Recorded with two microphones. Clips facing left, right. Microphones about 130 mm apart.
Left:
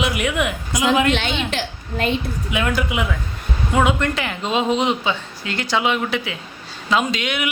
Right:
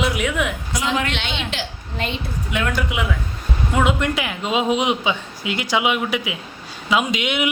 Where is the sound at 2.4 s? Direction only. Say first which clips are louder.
Left 1 dB; 5° left (ahead or behind).